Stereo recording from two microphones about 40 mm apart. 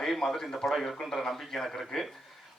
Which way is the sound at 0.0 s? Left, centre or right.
Centre.